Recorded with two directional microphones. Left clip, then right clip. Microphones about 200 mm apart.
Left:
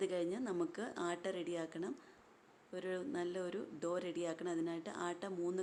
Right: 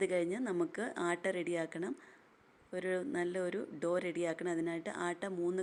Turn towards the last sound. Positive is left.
turn(degrees=-15)  # may be behind; listen again after turning